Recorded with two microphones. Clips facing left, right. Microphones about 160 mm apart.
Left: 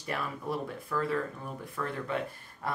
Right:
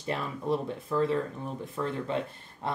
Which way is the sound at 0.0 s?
25° right (ahead or behind).